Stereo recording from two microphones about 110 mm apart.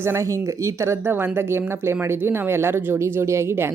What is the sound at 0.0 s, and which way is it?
Speech, 25° right (ahead or behind).